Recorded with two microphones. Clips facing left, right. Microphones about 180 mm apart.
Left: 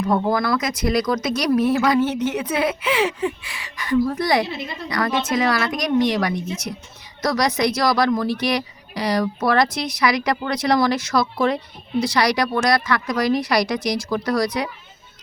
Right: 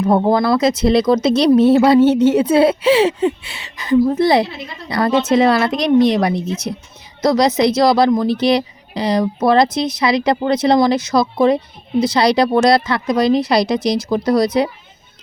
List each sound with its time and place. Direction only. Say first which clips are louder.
0.0 s speech: right 6 dB; 30° right (ahead or behind)